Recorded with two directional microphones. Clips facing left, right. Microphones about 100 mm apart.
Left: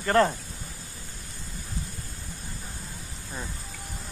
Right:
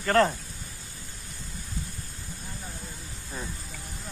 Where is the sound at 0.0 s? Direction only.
15° left (ahead or behind).